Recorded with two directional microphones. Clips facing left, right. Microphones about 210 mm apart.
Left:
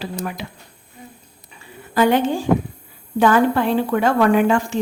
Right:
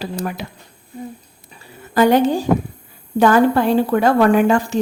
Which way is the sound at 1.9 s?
40° right (ahead or behind).